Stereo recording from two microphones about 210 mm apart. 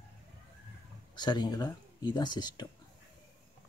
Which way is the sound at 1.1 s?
20° left (ahead or behind).